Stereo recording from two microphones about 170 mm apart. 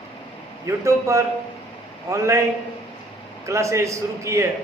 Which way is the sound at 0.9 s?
20° right (ahead or behind).